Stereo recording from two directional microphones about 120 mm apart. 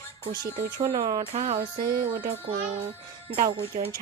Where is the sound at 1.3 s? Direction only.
65° right (ahead or behind).